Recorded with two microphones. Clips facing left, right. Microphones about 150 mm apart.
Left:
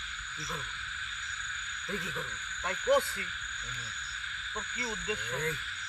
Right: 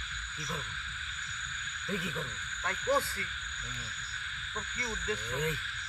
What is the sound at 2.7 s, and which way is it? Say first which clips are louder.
Speech: left 3 dB; 20° left (ahead or behind).